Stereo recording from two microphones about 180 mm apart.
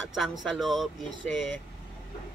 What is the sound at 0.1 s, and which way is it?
Speech, centre (ahead or behind).